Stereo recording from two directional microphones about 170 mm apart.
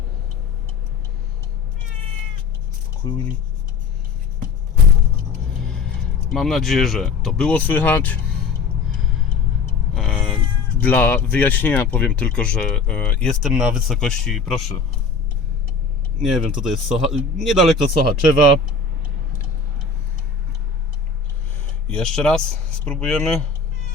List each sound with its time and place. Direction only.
3.0 s rub: 20° left (ahead or behind)
6.3 s speech: centre (ahead or behind)
9.9 s vehicle: 5° left (ahead or behind)
10.8 s speech: 10° left (ahead or behind)
16.2 s speech: centre (ahead or behind)
21.8 s speech: 5° left (ahead or behind)